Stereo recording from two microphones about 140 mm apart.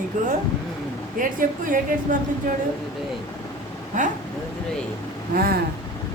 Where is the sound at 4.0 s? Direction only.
65° right (ahead or behind).